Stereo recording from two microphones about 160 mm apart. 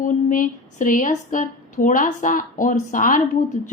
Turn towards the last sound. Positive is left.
turn(degrees=55)  # may be behind; listen again after turning